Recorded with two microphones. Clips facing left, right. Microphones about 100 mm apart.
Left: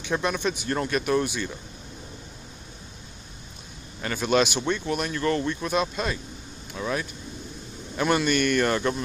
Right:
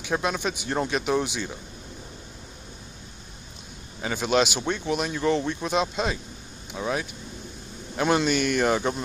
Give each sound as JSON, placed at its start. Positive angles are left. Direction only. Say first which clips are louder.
{"t": 0.0, "sound": "speech", "louder": "even", "side_deg": -10}
{"t": 4.0, "sound": "speech", "louder": "even", "side_deg": -10}
{"t": 8.3, "sound": "speech", "louder": "even", "side_deg": -10}